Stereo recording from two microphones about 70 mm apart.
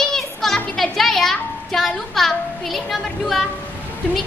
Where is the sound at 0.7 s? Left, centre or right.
Centre.